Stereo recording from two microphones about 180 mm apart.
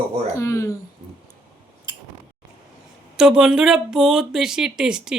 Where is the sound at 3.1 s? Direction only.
5° right (ahead or behind).